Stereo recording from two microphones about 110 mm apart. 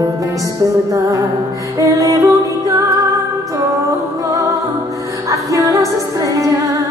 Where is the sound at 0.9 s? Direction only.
30° right (ahead or behind).